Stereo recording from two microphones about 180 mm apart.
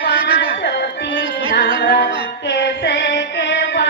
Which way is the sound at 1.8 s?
70° left (ahead or behind).